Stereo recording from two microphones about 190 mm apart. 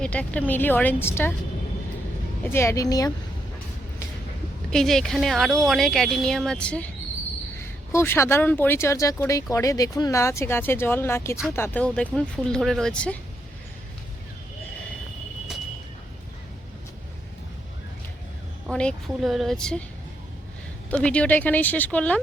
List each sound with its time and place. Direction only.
0.0 s speech: 5° left (ahead or behind)
2.5 s speech: 15° left (ahead or behind)
4.7 s speech: centre (ahead or behind)
18.7 s speech: 5° left (ahead or behind)
20.9 s speech: 5° left (ahead or behind)